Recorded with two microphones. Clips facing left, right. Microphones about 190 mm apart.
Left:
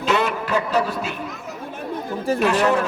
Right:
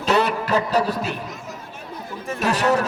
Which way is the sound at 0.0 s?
40° right (ahead or behind).